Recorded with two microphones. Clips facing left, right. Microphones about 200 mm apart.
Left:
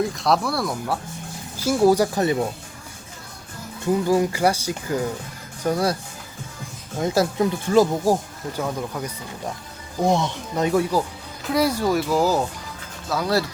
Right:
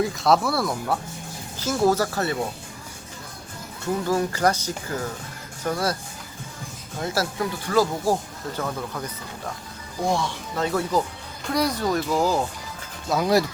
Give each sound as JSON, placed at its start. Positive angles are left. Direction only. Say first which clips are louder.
{"t": 0.0, "sound": "speech", "louder": "right 1 dB", "side_deg": 0}
{"t": 1.5, "sound": "speech", "louder": "left 4 dB", "side_deg": 10}
{"t": 4.0, "sound": "speech", "louder": "left 2 dB", "side_deg": 15}
{"t": 7.0, "sound": "speech", "louder": "left 6 dB", "side_deg": 20}
{"t": 11.4, "sound": "speech", "louder": "left 3 dB", "side_deg": 5}
{"t": 13.1, "sound": "speech", "louder": "right 2 dB", "side_deg": -15}